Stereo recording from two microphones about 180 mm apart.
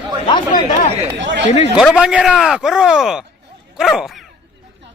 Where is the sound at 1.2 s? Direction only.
85° right.